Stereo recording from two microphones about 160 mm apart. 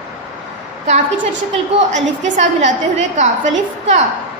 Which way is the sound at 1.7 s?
50° right (ahead or behind).